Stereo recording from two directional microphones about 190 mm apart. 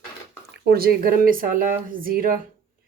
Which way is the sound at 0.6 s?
55° right (ahead or behind).